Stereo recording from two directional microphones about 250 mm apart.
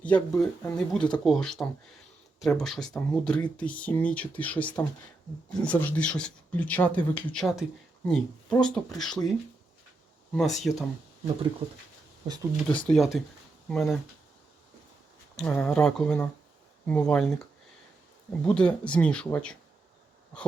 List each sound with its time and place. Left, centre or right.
0.0 s speech: centre
10.3 s speech: centre
12.8 s speech: centre
15.4 s speech: centre